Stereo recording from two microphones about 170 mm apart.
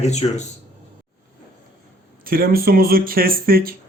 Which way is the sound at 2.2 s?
60° right (ahead or behind).